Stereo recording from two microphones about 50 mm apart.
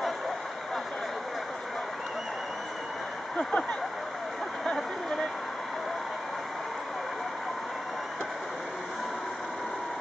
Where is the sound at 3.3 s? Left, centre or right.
Left.